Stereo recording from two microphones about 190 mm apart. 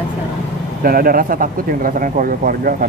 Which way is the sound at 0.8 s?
50° right (ahead or behind).